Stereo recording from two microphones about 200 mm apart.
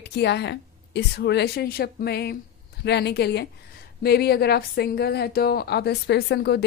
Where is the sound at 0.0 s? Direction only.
55° left (ahead or behind).